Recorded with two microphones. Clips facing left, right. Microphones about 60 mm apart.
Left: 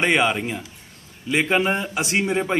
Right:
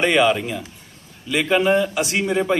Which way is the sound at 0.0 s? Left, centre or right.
Left.